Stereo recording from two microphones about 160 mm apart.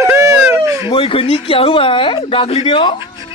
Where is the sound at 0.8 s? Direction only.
35° left (ahead or behind).